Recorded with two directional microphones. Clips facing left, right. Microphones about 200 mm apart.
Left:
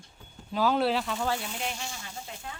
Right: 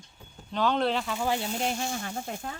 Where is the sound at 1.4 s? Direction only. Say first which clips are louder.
Right 6 dB; 40° right (ahead or behind).